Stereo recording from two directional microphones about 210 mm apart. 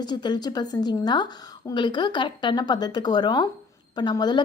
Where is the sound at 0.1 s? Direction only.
20° left (ahead or behind).